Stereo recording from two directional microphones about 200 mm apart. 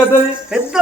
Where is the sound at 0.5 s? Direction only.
5° right (ahead or behind).